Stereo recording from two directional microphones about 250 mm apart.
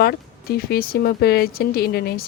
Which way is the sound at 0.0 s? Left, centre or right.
Left.